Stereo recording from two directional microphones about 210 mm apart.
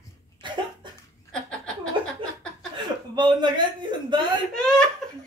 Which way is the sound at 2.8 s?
20° right (ahead or behind).